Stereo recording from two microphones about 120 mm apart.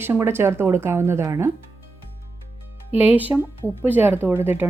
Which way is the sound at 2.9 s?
15° right (ahead or behind).